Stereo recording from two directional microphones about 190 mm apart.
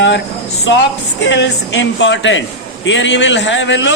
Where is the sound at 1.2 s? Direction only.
70° left (ahead or behind).